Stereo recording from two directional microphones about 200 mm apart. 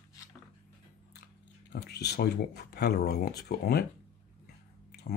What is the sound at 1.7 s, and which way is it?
Speech, 55° left (ahead or behind).